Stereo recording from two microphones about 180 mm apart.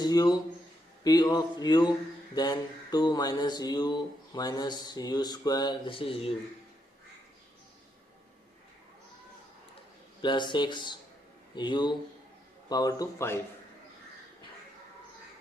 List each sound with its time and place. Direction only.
0.0 s speech: 20° left (ahead or behind)
1.0 s mantra: 25° left (ahead or behind)
10.2 s mantra: 25° left (ahead or behind)